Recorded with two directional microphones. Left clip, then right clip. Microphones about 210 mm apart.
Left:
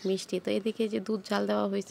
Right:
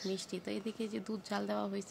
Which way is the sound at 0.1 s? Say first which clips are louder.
Left 10 dB; 30° left (ahead or behind).